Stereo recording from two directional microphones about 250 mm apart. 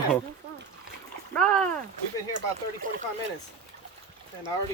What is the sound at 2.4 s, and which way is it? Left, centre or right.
Speech, right.